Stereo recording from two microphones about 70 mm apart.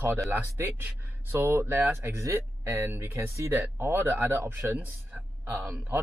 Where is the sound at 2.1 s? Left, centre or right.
Right.